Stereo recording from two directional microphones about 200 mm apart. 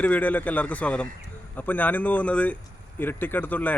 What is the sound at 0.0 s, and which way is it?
Speech, 10° left (ahead or behind).